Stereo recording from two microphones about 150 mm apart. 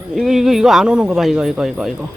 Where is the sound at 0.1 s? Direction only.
Centre (ahead or behind).